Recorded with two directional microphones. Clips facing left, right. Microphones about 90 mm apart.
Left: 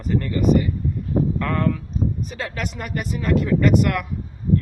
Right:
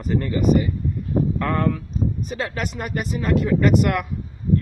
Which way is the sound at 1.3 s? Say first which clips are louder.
Right 1 dB; 15° right (ahead or behind).